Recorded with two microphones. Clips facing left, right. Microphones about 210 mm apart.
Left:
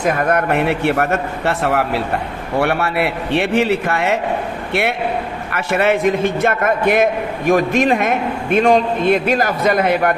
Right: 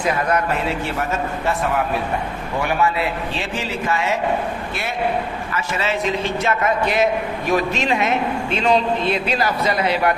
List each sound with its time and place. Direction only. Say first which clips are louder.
0.0 s a man's voice: left 3 dB; 50° left (ahead or behind)